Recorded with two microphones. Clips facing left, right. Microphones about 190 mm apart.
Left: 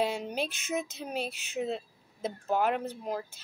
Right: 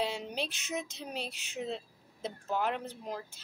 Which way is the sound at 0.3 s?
50° left (ahead or behind).